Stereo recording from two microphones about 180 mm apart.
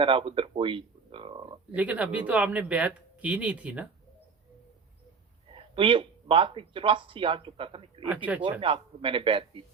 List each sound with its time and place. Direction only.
0.0 s speech: 30° right (ahead or behind)
1.7 s speech: 5° right (ahead or behind)
5.5 s speech: 30° right (ahead or behind)
8.0 s speech: 10° right (ahead or behind)
8.4 s speech: 30° right (ahead or behind)